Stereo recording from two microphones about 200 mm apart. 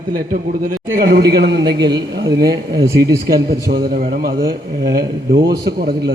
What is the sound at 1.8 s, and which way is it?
Speech, 20° right (ahead or behind).